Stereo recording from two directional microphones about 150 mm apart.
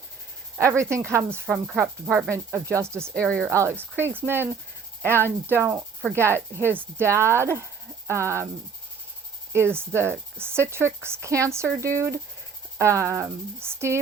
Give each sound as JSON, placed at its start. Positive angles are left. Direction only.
{"t": 0.6, "sound": "speech", "side_deg": -20}
{"t": 1.5, "sound": "speech", "side_deg": -5}
{"t": 2.3, "sound": "speech", "side_deg": -20}
{"t": 9.5, "sound": "speech", "side_deg": -15}